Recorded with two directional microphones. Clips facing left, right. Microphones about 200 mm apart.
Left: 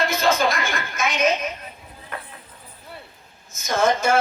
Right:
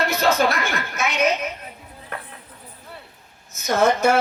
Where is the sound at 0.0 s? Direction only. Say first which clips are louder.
Right 1 dB; 65° right (ahead or behind).